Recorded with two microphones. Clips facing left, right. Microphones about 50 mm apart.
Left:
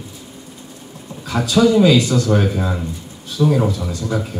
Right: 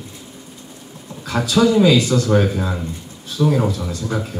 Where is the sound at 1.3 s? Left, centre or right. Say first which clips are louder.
Even; centre.